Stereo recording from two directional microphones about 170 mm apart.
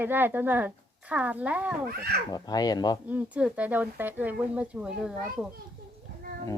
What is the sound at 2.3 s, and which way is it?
Speech, 25° left (ahead or behind).